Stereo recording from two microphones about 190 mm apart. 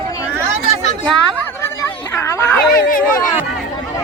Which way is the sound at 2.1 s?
15° left (ahead or behind).